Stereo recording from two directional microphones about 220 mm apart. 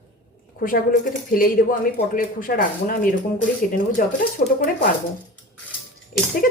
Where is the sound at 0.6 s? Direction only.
40° left (ahead or behind).